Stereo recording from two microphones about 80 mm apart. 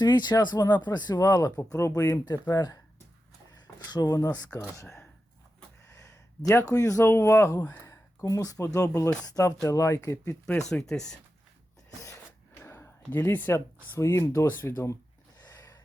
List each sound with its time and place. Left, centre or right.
0.0 s speech: left
6.7 s speech: left
7.0 s speech: left
7.8 s a sound: left
9.0 s speech: left
10.6 s speech: centre
12.6 s a sound: left
13.9 s speech: left
15.4 s a sound: left